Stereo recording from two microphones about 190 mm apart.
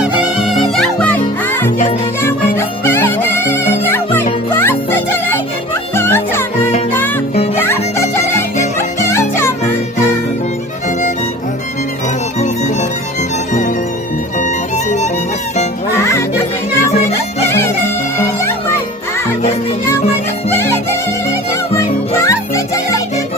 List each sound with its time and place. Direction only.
0.6 s music: 5° left (ahead or behind)
13.5 s music: 40° left (ahead or behind)
15.9 s music: 15° left (ahead or behind)
20.5 s music: 15° left (ahead or behind)